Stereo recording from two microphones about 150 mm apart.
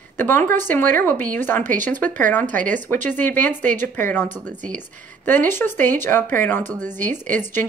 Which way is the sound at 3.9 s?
15° left (ahead or behind).